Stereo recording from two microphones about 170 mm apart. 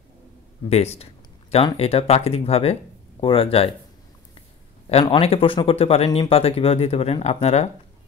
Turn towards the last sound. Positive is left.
turn(degrees=40)  # may be behind; listen again after turning